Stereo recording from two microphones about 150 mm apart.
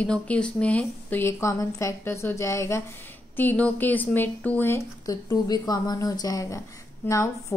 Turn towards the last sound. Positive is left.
turn(degrees=20)  # may be behind; listen again after turning